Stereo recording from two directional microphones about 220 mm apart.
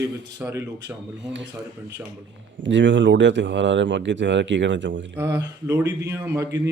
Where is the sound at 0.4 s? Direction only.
10° right (ahead or behind).